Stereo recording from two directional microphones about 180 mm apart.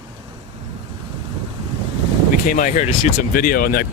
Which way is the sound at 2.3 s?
50° left (ahead or behind).